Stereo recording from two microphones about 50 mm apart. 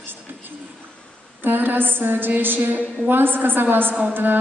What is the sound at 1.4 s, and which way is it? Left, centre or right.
A woman's voice, right.